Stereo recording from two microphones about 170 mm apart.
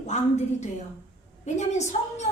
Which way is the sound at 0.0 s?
40° left (ahead or behind).